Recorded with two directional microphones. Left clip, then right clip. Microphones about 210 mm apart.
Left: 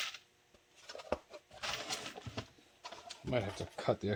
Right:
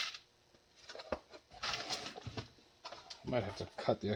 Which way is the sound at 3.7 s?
45° left (ahead or behind).